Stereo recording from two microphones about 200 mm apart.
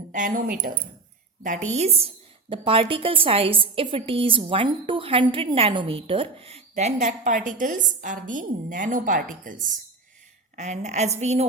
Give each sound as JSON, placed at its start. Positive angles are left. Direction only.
{"t": 0.1, "sound": "speech", "side_deg": -40}
{"t": 1.7, "sound": "a woman's voice", "side_deg": -30}